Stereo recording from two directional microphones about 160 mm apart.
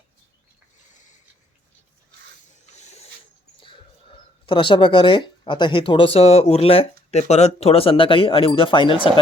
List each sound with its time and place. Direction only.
2.7 s printer: 45° left (ahead or behind)
3.6 s speech: 30° left (ahead or behind)